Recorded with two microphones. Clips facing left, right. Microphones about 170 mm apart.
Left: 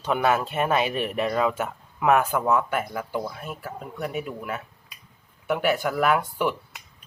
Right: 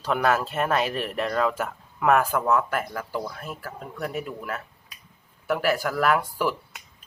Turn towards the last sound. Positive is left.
turn(degrees=0)  # may be behind; listen again after turning